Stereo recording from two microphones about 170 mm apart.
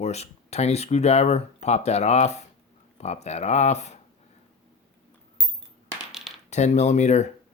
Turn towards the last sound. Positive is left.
turn(degrees=40)  # may be behind; listen again after turning